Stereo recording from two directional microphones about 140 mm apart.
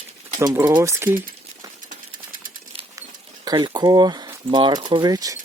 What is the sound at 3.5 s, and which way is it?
Speech, 30° right (ahead or behind).